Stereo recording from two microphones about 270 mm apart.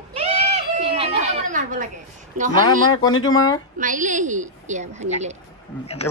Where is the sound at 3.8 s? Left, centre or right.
Right.